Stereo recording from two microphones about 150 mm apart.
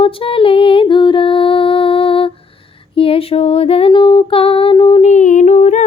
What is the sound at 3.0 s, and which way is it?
Female singing, 40° left (ahead or behind).